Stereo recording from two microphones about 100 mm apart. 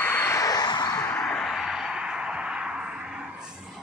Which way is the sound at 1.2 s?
10° left (ahead or behind).